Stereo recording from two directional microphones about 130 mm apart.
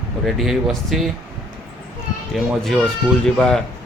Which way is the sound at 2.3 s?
Centre (ahead or behind).